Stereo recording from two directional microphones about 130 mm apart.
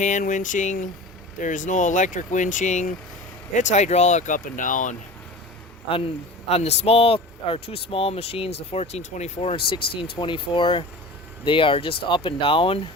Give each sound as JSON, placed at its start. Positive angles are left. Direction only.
{"t": 0.0, "sound": "speech", "side_deg": 75}
{"t": 6.5, "sound": "speech", "side_deg": 55}